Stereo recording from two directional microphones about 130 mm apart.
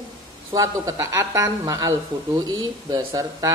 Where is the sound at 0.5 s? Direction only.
25° right (ahead or behind).